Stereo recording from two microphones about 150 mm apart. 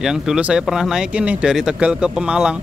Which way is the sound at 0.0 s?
5° right (ahead or behind).